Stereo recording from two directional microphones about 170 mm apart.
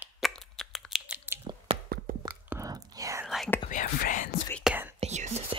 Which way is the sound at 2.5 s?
20° right (ahead or behind).